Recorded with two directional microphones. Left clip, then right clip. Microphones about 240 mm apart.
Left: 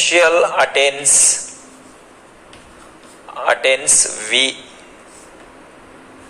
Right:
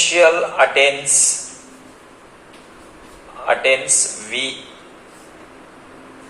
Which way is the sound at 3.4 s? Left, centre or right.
Left.